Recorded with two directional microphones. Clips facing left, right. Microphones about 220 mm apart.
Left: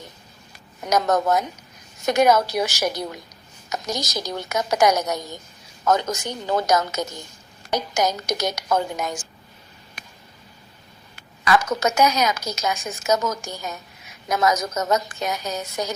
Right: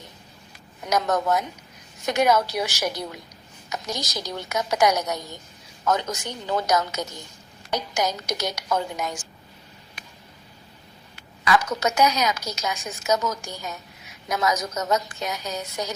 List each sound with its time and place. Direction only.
0.9 s a woman's voice: 45° left (ahead or behind)
10.0 s a sound: 45° left (ahead or behind)
11.4 s a woman's voice: 45° left (ahead or behind)